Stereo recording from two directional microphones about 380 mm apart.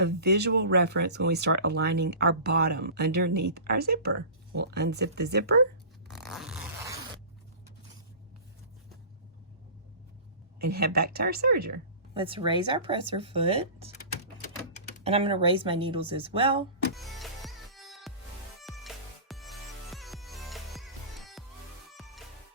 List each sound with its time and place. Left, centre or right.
0.0 s speech: right
6.1 s a sound: centre
10.7 s speech: right
12.1 s speech: centre
15.0 s speech: centre
16.9 s music: centre